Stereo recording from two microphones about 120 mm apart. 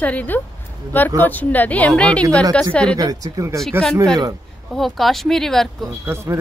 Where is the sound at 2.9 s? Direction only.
30° right (ahead or behind).